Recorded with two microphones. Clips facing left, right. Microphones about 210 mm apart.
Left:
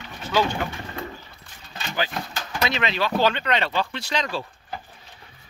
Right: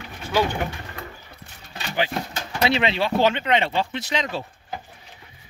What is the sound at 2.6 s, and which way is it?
Speech, 25° right (ahead or behind).